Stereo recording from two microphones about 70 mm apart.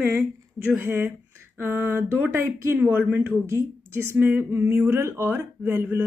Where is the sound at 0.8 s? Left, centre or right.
Right.